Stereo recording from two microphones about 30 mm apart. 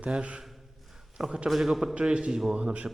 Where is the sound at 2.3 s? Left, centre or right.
Centre.